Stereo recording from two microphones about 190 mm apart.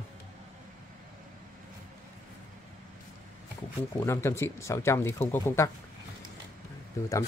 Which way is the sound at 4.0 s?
15° left (ahead or behind).